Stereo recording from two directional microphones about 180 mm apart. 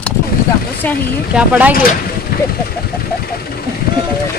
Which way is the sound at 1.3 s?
10° right (ahead or behind).